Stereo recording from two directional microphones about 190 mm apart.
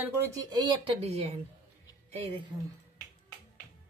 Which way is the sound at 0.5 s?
30° right (ahead or behind).